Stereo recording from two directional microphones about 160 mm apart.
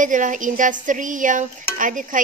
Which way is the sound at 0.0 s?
55° right (ahead or behind).